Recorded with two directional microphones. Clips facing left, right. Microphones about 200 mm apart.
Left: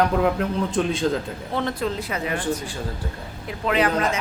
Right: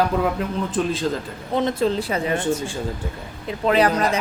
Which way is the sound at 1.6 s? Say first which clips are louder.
Right 5 dB; 20° right (ahead or behind).